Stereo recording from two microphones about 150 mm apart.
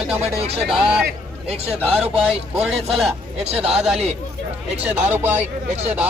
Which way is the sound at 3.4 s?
45° right (ahead or behind).